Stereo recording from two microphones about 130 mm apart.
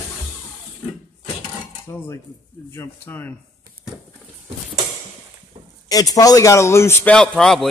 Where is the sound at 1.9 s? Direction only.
25° left (ahead or behind).